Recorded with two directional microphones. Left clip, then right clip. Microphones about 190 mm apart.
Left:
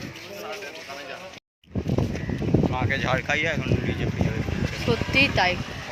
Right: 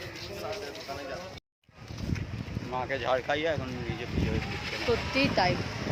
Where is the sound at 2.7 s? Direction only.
20° right (ahead or behind).